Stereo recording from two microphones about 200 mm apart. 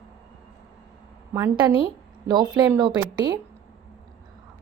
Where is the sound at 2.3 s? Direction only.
20° right (ahead or behind).